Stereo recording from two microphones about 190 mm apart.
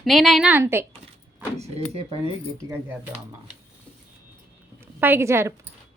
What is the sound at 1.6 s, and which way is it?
Speech, 30° right (ahead or behind).